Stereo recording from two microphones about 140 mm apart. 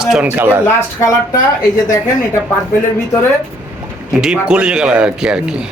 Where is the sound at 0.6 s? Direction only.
25° left (ahead or behind).